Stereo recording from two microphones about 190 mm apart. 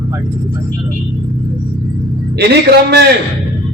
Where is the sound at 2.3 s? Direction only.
60° right (ahead or behind).